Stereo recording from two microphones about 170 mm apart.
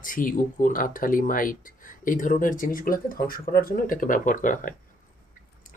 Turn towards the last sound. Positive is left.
turn(degrees=50)  # may be behind; listen again after turning